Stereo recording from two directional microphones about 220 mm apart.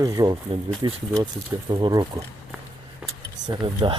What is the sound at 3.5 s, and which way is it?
Speech, 20° right (ahead or behind).